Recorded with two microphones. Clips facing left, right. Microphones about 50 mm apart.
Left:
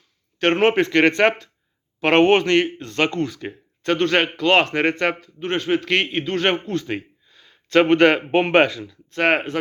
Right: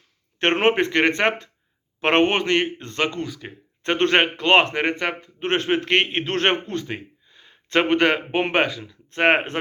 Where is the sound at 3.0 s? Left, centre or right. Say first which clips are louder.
Left 3 dB; centre.